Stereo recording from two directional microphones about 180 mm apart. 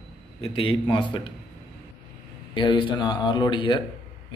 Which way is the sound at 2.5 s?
25° left (ahead or behind).